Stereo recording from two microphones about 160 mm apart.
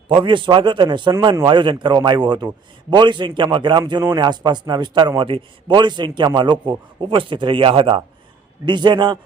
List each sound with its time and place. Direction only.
0.1 s a man's voice: 30° right (ahead or behind)